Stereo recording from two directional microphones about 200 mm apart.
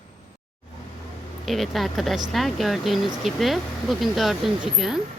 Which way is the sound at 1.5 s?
Centre (ahead or behind).